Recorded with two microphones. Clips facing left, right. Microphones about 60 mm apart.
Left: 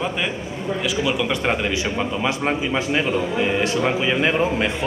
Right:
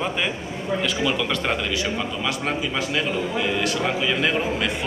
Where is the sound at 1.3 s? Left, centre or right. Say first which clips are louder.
Left 3 dB; left.